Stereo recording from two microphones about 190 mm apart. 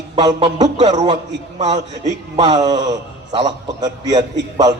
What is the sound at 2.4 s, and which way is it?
A man's voice, 20° right (ahead or behind).